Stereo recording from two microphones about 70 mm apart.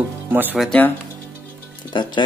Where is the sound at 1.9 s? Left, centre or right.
Left.